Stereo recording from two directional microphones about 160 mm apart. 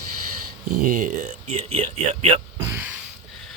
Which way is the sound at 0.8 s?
60° right (ahead or behind).